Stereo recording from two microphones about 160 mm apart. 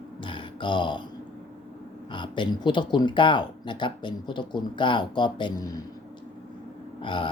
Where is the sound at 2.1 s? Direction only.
30° left (ahead or behind).